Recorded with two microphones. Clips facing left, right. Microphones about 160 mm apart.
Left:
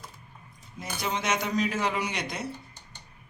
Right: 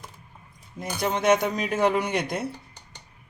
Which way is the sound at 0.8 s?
55° right (ahead or behind).